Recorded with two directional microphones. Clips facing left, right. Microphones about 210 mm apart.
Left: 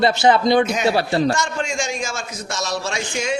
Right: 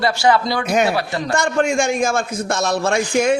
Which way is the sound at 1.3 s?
55° right (ahead or behind).